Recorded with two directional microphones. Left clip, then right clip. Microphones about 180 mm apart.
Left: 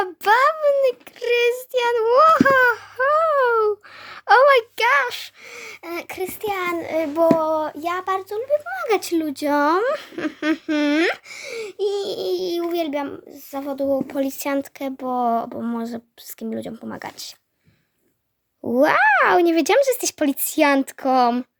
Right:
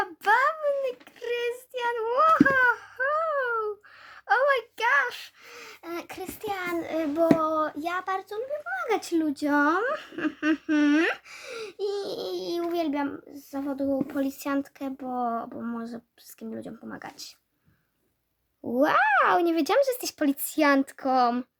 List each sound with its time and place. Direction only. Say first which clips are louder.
0.3 s child singing: left 7 dB; 45° left (ahead or behind)
7.3 s a sound: left 5 dB; 30° left (ahead or behind)
16.4 s speech: left 9 dB; 35° left (ahead or behind)
18.6 s speech: left 6 dB; 30° left (ahead or behind)